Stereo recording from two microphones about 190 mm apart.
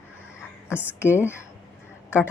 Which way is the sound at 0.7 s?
10° right (ahead or behind).